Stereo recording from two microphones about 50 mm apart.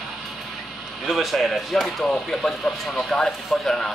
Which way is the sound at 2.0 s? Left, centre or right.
Centre.